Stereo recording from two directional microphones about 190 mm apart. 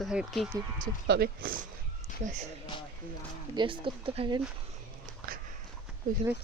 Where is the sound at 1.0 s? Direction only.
55° right (ahead or behind).